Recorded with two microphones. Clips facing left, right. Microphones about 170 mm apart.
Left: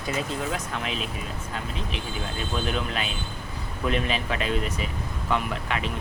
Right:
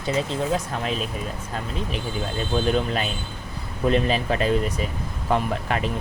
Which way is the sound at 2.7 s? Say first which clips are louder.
Right 5 dB; 40° right (ahead or behind).